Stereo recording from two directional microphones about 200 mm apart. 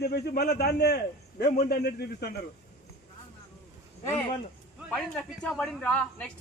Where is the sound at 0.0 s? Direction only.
55° left (ahead or behind).